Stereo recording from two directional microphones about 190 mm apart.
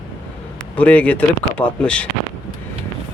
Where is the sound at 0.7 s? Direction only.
5° left (ahead or behind).